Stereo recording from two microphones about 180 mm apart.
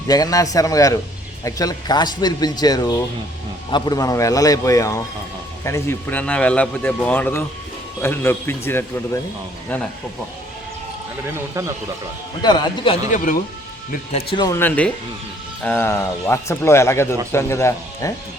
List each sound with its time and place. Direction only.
0.1 s speech: 20° left (ahead or behind)
11.3 s speech: 15° right (ahead or behind)
12.4 s speech: 25° left (ahead or behind)
13.1 s speech: 45° left (ahead or behind)
14.3 s speech: 20° left (ahead or behind)
14.6 s speech: 10° left (ahead or behind)